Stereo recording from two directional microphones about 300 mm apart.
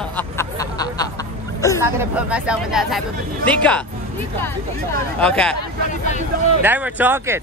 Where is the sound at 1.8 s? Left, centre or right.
Centre.